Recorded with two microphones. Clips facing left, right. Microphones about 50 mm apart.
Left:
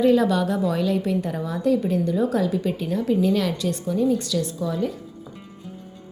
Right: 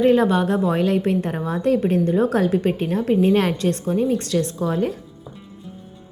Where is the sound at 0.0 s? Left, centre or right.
Right.